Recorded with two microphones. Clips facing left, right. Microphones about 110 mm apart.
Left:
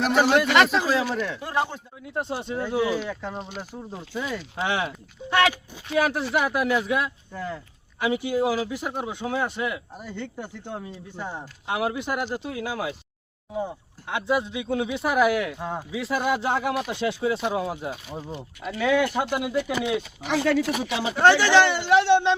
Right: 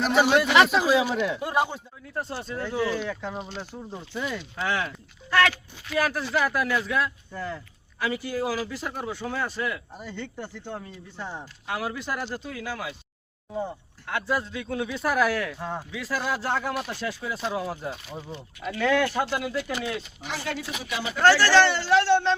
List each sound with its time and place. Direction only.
0.0 s speech: centre (ahead or behind); by 1.6 s 15° right (ahead or behind)
2.0 s speech: 20° left (ahead or behind)
4.6 s speech: 25° left (ahead or behind)
4.9 s speech: 15° left (ahead or behind)
7.3 s speech: 5° left (ahead or behind)
7.9 s speech: 20° left (ahead or behind)
13.5 s speech: 5° left (ahead or behind)
14.1 s speech: 20° left (ahead or behind)
16.0 s speech: 25° left (ahead or behind)
17.8 s speech: 5° left (ahead or behind)
20.2 s speech: 80° left
21.0 s speech: 25° left (ahead or behind)